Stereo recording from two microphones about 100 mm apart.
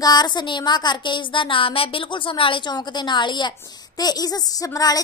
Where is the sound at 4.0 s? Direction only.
40° left (ahead or behind).